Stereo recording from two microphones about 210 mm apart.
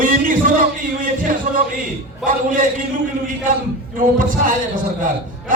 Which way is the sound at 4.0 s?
40° right (ahead or behind).